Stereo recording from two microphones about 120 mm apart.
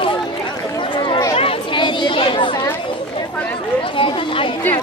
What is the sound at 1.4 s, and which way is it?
Chatter, 45° left (ahead or behind).